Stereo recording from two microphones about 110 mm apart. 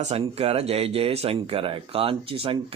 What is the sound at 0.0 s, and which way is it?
Speech, 70° right (ahead or behind).